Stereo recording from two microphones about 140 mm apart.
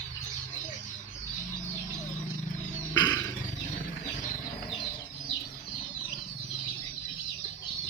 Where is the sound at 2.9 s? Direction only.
30° left (ahead or behind).